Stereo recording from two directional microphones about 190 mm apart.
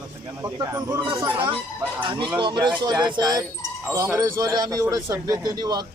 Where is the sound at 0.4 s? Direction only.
15° right (ahead or behind).